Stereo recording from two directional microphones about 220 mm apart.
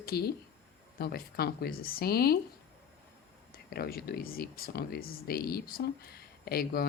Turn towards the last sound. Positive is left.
turn(degrees=45)  # may be behind; listen again after turning